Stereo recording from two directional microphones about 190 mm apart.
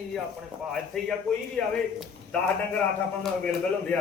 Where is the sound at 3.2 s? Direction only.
5° left (ahead or behind).